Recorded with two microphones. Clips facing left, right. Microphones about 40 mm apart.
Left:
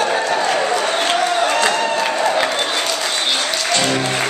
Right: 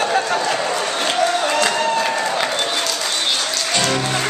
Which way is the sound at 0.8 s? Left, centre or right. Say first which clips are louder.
Left 3 dB; left.